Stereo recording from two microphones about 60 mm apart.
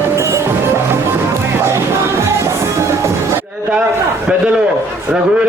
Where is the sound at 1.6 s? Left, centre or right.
Right.